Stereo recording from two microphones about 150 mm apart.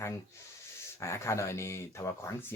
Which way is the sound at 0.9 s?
20° left (ahead or behind).